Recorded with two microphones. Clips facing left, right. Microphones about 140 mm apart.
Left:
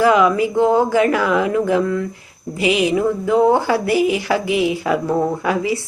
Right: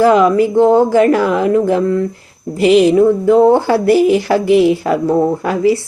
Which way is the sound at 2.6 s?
5° left (ahead or behind).